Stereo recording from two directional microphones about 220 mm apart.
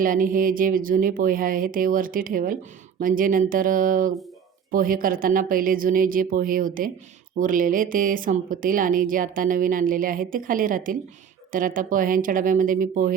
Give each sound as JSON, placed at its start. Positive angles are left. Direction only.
{"t": 0.0, "sound": "speech", "side_deg": -40}